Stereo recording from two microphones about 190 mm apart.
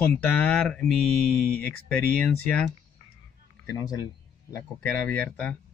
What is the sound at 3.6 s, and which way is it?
Speech, 20° left (ahead or behind).